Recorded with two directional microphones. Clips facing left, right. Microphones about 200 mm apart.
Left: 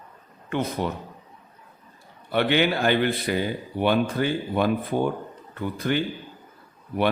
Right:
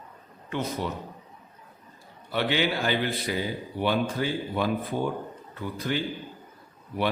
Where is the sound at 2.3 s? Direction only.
60° left (ahead or behind).